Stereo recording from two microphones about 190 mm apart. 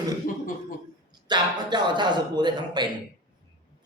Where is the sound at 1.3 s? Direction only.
25° right (ahead or behind).